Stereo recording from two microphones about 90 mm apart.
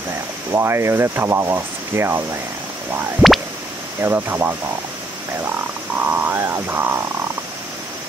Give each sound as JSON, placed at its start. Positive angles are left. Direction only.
{"t": 0.5, "sound": "speech", "side_deg": -30}
{"t": 3.2, "sound": "a sound", "side_deg": -20}
{"t": 4.0, "sound": "speech", "side_deg": -25}
{"t": 5.9, "sound": "speech", "side_deg": -20}